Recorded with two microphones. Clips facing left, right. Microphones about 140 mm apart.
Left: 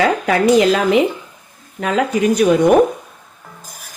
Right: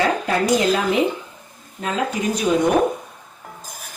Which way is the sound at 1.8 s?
65° left (ahead or behind).